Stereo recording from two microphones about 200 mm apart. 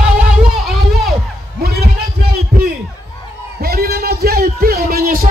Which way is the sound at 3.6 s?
50° right (ahead or behind).